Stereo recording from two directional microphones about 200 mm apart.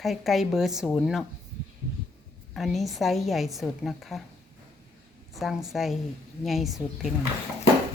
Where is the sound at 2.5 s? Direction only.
Centre (ahead or behind).